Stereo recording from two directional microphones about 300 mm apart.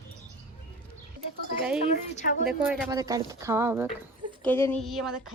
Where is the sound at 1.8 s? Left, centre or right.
Left.